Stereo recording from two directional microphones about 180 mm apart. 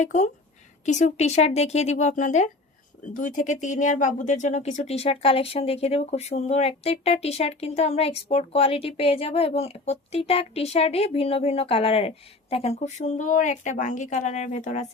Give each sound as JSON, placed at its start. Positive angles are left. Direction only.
{"t": 0.0, "sound": "speech", "side_deg": 40}